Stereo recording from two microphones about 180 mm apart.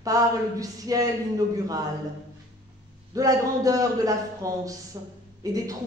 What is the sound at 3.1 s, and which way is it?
A man's voice, 20° right (ahead or behind).